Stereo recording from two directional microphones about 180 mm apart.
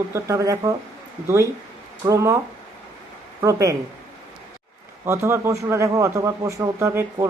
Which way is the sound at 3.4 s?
20° right (ahead or behind).